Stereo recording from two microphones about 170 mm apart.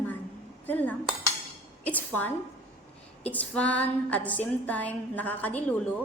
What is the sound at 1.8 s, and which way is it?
A woman's voice, 10° left (ahead or behind).